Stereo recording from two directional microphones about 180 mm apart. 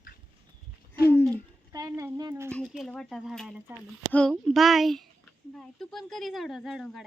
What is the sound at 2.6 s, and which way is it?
Speech, 5° right (ahead or behind).